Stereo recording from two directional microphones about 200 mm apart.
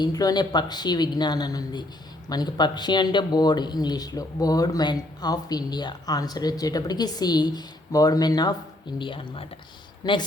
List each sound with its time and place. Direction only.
0.0 s speech: 20° left (ahead or behind)